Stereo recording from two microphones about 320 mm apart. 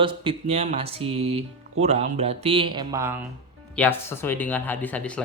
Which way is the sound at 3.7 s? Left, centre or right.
Centre.